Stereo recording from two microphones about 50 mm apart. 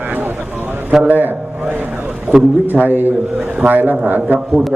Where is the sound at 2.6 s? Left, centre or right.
Right.